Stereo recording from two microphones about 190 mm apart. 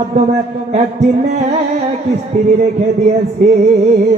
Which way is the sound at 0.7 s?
35° right (ahead or behind).